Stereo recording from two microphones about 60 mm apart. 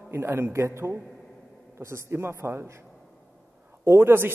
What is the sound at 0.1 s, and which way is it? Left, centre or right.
A man's voice, right.